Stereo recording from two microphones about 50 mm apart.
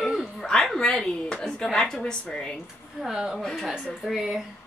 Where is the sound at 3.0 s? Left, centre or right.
Centre.